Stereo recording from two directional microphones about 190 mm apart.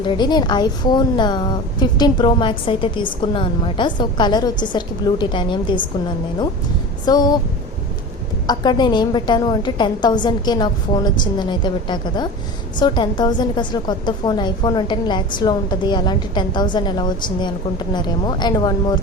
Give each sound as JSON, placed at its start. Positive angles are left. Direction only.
{"t": 0.2, "sound": "a woman's voice", "side_deg": 20}
{"t": 7.0, "sound": "a woman's voice", "side_deg": 20}
{"t": 8.4, "sound": "a woman's voice", "side_deg": 20}